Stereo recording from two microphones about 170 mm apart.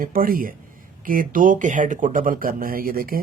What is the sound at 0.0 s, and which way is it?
A man's voice, 55° right (ahead or behind).